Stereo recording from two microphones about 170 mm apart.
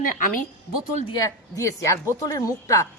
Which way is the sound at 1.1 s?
20° left (ahead or behind).